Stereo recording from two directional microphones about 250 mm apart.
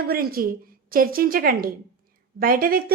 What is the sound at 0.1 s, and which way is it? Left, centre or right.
A woman's voice, right.